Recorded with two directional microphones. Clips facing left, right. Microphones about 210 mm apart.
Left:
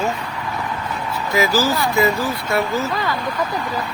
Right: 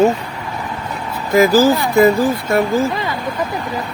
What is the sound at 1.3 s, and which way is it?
Speech, 55° right (ahead or behind).